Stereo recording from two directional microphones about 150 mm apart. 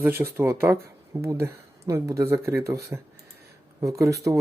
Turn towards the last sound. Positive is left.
turn(degrees=-20)  # may be behind; listen again after turning